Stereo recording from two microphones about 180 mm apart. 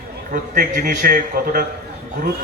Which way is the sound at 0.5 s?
50° right (ahead or behind).